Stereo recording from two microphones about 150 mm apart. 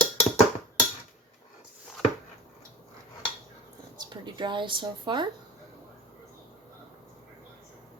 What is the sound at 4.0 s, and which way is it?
Speech, 30° right (ahead or behind).